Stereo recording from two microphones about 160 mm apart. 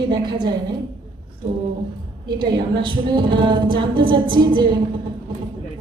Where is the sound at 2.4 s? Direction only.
30° right (ahead or behind).